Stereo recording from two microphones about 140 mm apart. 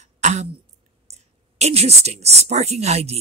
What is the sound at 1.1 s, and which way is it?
Clicking, 50° right (ahead or behind).